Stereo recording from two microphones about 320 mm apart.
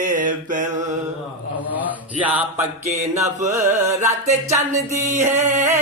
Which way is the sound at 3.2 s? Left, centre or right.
Centre.